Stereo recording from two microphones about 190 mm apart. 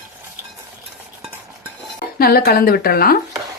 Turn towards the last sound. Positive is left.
turn(degrees=50)  # may be behind; listen again after turning